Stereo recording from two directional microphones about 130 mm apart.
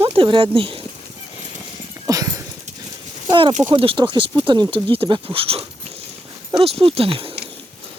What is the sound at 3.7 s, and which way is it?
Speech, 45° right (ahead or behind).